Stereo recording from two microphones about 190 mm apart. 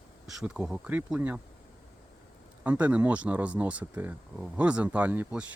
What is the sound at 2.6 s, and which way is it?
Speech, 10° right (ahead or behind).